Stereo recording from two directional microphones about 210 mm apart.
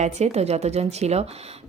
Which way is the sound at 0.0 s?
30° right (ahead or behind).